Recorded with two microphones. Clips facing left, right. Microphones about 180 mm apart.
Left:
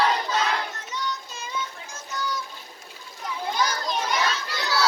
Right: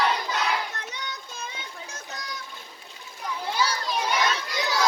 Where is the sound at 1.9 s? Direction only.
60° right (ahead or behind).